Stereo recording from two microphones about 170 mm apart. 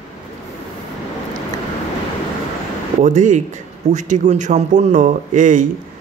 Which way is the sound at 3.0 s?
45° right (ahead or behind).